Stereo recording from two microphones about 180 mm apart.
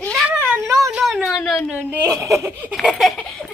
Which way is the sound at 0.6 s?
15° right (ahead or behind).